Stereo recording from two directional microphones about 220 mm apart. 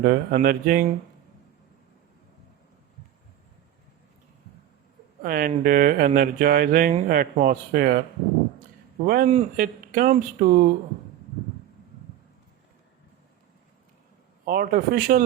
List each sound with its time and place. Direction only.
0.0 s mantra: 40° right (ahead or behind)
5.2 s speech: 40° right (ahead or behind)
9.0 s speech: 35° right (ahead or behind)
14.4 s speech: 40° right (ahead or behind)